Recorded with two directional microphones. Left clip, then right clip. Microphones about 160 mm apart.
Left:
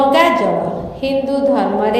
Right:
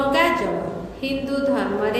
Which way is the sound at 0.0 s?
40° left (ahead or behind).